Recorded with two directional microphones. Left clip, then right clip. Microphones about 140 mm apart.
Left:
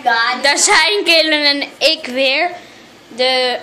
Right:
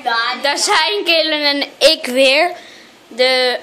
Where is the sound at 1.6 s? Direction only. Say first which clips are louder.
Right 2 dB; 65° right (ahead or behind).